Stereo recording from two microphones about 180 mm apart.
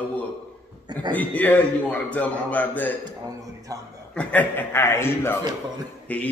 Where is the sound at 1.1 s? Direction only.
10° left (ahead or behind).